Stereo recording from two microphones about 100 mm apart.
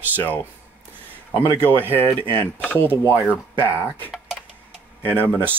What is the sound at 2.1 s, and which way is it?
Speech, 60° right (ahead or behind).